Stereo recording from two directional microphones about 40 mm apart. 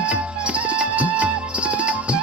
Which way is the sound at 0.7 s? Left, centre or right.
Right.